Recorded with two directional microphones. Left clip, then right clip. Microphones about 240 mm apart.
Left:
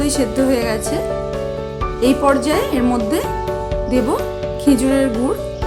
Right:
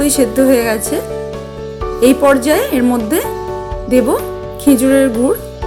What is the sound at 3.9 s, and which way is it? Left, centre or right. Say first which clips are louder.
A woman's voice: right 7 dB; centre.